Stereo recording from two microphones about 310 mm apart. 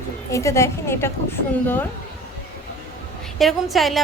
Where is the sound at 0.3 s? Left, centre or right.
Centre.